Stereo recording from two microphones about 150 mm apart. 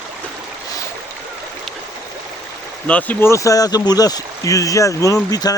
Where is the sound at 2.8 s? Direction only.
10° left (ahead or behind).